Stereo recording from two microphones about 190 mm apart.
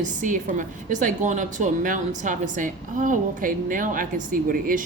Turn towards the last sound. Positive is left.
turn(degrees=-45)  # may be behind; listen again after turning